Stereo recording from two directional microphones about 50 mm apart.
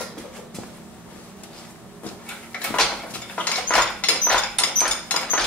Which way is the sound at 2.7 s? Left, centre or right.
Left.